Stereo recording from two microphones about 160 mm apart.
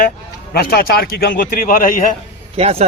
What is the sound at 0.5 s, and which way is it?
A man's voice, 75° left (ahead or behind).